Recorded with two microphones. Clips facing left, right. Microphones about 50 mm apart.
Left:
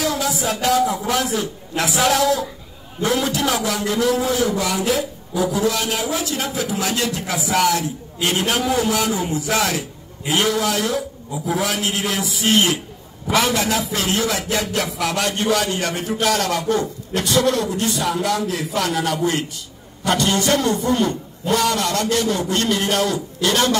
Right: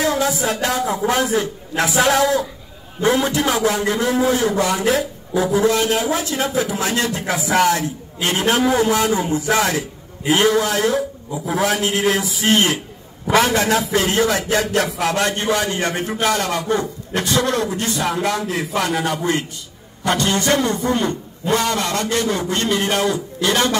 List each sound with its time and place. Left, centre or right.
0.0 s a man's voice: right
16.1 s speech: centre
16.3 s a man's voice: centre
17.1 s a man's voice: right
20.1 s a man's voice: centre; by 23.8 s right